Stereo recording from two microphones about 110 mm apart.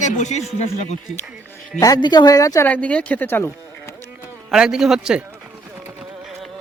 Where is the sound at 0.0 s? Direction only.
90° left.